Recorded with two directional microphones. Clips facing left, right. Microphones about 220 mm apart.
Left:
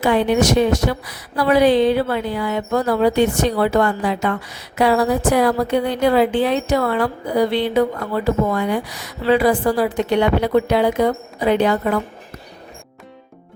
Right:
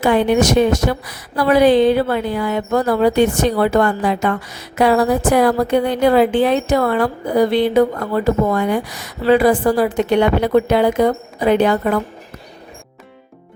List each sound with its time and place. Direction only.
0.0 s a woman's voice: 50° right (ahead or behind)